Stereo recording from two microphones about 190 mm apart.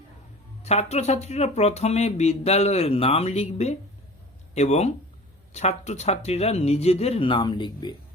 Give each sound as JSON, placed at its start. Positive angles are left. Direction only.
{"t": 0.6, "sound": "speech", "side_deg": 35}